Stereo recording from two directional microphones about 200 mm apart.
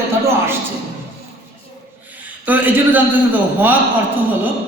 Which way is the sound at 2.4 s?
10° right (ahead or behind).